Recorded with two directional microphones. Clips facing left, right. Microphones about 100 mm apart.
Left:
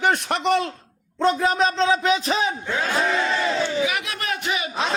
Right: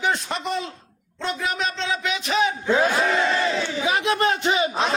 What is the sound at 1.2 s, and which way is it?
A man's voice, 35° left (ahead or behind).